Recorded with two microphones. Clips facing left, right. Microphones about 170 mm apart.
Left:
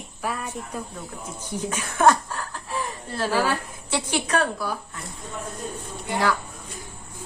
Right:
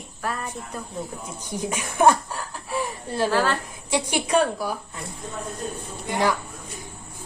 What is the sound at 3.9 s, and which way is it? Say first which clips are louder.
Speech: right 3 dB; 15° right (ahead or behind).